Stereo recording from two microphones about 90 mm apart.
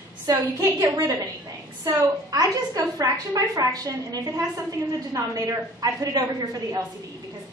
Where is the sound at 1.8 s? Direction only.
45° right (ahead or behind).